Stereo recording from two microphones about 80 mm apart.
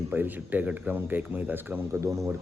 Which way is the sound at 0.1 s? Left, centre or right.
Right.